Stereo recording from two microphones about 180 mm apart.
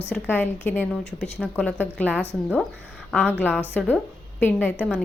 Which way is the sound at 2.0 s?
10° right (ahead or behind).